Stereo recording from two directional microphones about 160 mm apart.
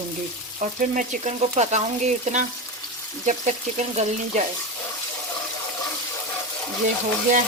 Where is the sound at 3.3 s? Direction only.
45° right (ahead or behind).